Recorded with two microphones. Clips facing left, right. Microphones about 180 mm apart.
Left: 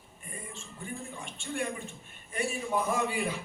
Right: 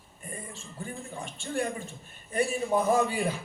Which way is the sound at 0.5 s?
40° right (ahead or behind).